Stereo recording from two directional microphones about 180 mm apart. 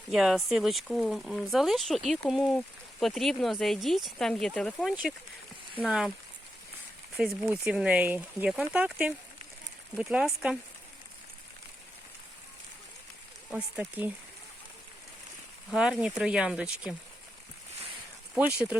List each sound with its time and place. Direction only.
0.1 s speech: centre (ahead or behind)
7.2 s speech: 5° right (ahead or behind)
13.5 s speech: 5° right (ahead or behind)
15.7 s speech: 5° right (ahead or behind)
18.3 s speech: 5° right (ahead or behind)